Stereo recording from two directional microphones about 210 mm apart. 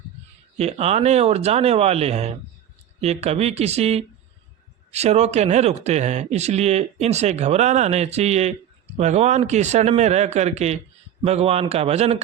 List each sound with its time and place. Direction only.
0.5 s a man's voice: 30° right (ahead or behind)